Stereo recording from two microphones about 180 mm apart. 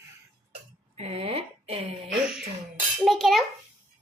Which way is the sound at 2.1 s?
5° right (ahead or behind).